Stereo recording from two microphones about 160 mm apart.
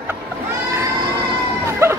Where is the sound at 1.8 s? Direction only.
15° right (ahead or behind).